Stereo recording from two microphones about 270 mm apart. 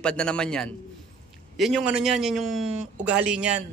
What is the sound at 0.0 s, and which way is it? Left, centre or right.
Speech, centre.